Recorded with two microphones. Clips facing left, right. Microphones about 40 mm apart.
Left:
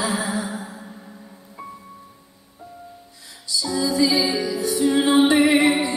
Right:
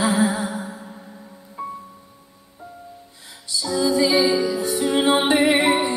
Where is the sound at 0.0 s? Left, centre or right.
Right.